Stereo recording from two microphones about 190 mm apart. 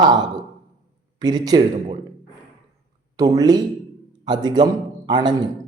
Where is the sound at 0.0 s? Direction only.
20° right (ahead or behind).